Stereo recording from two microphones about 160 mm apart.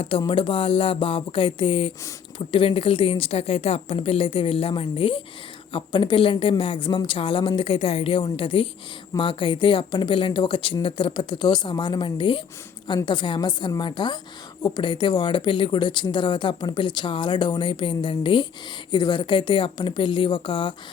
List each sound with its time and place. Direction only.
0.0 s a woman's voice: 35° left (ahead or behind)